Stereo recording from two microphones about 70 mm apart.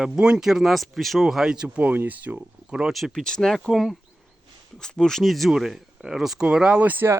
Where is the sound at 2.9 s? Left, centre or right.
Centre.